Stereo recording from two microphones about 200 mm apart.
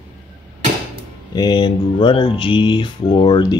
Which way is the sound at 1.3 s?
20° left (ahead or behind).